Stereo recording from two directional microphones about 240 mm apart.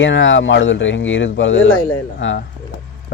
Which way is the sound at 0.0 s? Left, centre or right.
Left.